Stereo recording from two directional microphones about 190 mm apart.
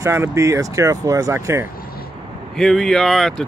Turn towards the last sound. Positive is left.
turn(degrees=0)  # may be behind; listen again after turning